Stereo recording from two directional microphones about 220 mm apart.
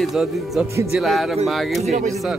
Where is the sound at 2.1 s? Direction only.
Centre (ahead or behind).